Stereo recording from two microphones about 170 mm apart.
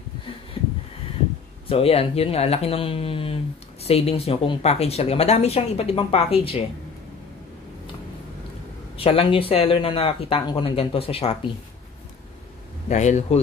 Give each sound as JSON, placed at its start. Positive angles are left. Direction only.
{"t": 0.6, "sound": "a sound", "side_deg": 35}
{"t": 1.7, "sound": "speech", "side_deg": 35}
{"t": 8.9, "sound": "speech", "side_deg": 35}
{"t": 12.8, "sound": "a man's voice", "side_deg": 45}